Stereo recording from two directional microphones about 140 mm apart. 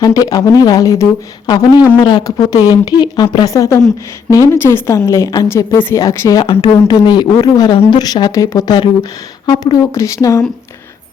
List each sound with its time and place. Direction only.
0.0 s speech: 25° left (ahead or behind)
6.4 s speech: 40° left (ahead or behind); by 10.4 s 25° left (ahead or behind)